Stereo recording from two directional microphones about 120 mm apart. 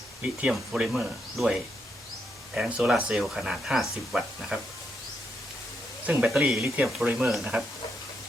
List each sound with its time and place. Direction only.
0.2 s speech: 10° right (ahead or behind)
2.6 s speech: 10° right (ahead or behind)
6.1 s speech: 5° right (ahead or behind)